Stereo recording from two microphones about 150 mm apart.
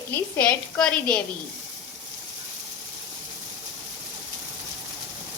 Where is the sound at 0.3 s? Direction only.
10° left (ahead or behind).